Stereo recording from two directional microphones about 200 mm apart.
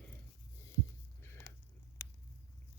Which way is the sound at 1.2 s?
10° left (ahead or behind).